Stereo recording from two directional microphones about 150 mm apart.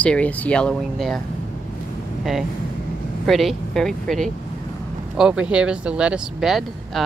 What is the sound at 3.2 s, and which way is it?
Speech, centre (ahead or behind).